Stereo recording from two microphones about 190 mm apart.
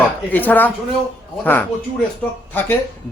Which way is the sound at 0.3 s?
10° left (ahead or behind).